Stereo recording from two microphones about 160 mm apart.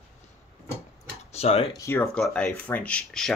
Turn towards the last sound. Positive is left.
turn(degrees=5)  # may be behind; listen again after turning